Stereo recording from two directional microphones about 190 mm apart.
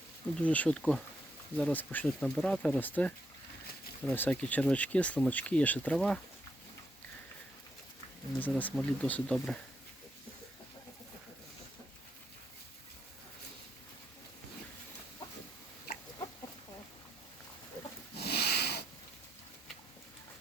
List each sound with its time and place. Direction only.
0.3 s speech: 5° left (ahead or behind)
8.4 s speech: 10° left (ahead or behind)
18.2 s a sound: 60° left (ahead or behind)